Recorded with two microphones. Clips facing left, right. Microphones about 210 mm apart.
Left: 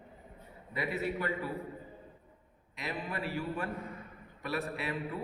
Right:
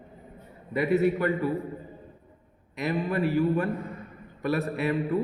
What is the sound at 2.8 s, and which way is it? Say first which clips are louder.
A man's voice: right 11 dB; 45° right (ahead or behind).